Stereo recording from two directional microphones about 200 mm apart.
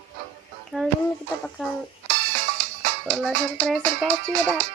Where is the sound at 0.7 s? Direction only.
5° left (ahead or behind).